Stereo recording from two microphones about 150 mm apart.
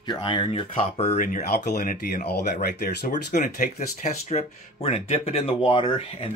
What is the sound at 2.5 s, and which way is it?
Speech, 60° left (ahead or behind).